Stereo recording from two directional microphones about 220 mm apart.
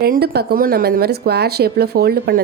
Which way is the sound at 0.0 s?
45° right (ahead or behind).